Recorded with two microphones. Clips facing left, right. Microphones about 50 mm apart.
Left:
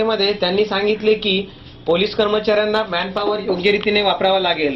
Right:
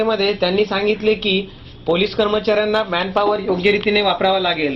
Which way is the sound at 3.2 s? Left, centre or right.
Right.